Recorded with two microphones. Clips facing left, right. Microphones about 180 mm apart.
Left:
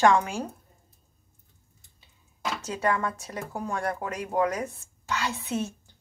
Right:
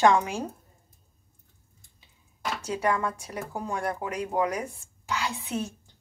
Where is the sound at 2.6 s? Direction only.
10° right (ahead or behind).